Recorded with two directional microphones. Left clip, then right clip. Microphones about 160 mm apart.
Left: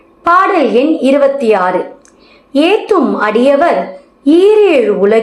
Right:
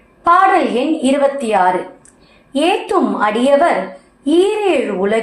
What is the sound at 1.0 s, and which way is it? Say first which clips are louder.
Speech: left 4 dB; 30° left (ahead or behind).